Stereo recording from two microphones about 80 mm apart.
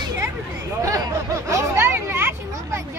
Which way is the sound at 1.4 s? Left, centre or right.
Right.